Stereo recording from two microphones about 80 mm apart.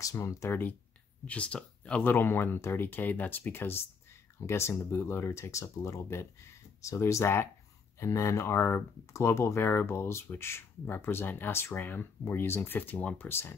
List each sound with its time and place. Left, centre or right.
0.0 s speech: left
1.2 s speech: centre
2.1 s speech: left